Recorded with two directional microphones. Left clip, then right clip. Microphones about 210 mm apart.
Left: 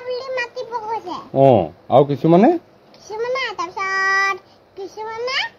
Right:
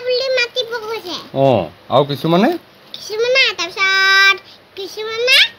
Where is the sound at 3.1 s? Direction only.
10° right (ahead or behind).